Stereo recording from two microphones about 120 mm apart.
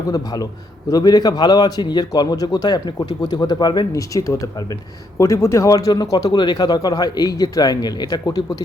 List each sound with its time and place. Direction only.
0.1 s a man's voice: 30° left (ahead or behind)